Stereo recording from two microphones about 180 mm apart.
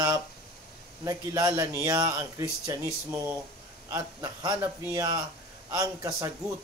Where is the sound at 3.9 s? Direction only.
20° right (ahead or behind).